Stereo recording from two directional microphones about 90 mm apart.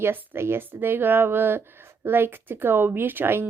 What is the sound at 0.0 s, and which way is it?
A woman's voice, 20° right (ahead or behind).